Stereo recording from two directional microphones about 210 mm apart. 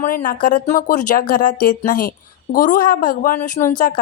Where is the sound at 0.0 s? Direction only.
40° left (ahead or behind).